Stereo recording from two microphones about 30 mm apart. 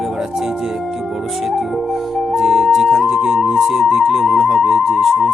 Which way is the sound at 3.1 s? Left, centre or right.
Centre.